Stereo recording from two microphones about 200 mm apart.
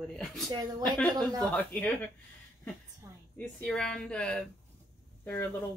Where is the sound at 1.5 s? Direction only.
10° left (ahead or behind).